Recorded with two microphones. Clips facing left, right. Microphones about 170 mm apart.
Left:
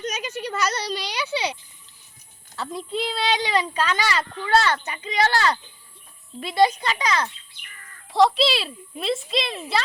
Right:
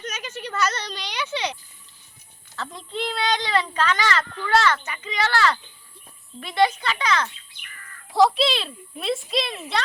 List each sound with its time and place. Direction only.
0.0 s a child's voice: 15° left (ahead or behind)
2.6 s a child's voice: 10° left (ahead or behind)
4.6 s a child's voice: 35° left (ahead or behind)
5.3 s a child's voice: 15° left (ahead or behind)
8.1 s speech: centre (ahead or behind)